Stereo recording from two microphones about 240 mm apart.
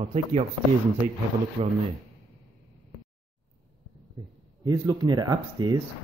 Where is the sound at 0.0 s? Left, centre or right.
Right.